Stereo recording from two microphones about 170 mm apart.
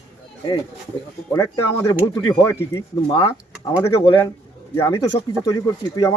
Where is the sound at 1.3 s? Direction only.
20° left (ahead or behind).